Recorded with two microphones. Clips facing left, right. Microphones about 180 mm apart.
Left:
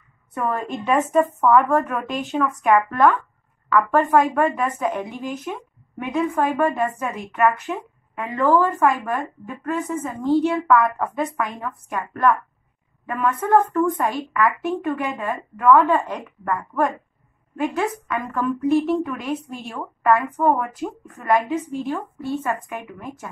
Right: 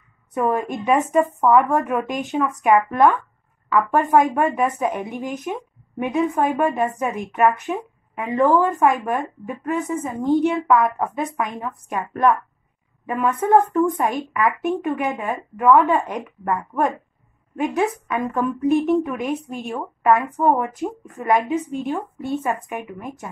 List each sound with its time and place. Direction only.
0.3 s a woman's voice: 15° right (ahead or behind)